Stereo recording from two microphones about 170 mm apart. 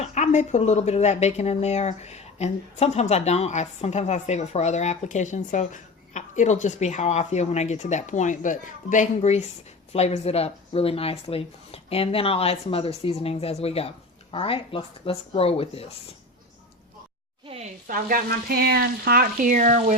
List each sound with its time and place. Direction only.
0.0 s speech: 45° left (ahead or behind)
17.8 s frying: 55° right (ahead or behind)